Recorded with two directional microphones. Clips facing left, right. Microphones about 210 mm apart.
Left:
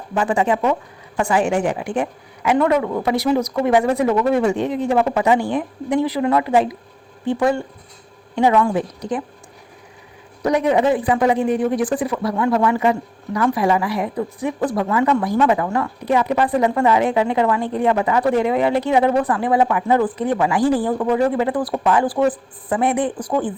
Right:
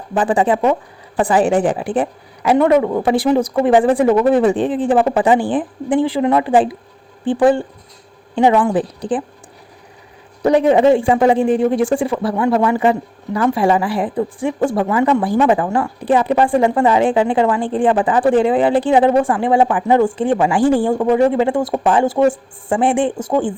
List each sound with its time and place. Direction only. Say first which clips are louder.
0.1 s a woman's voice: right 3 dB; 35° right (ahead or behind)
10.4 s speech: right 5 dB; 30° right (ahead or behind)